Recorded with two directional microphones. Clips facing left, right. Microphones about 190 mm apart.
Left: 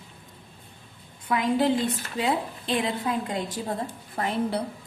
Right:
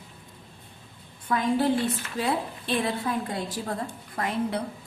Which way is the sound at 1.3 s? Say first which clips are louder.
Even; 15° left (ahead or behind).